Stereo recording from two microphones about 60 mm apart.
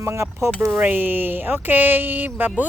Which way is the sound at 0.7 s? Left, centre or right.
Right.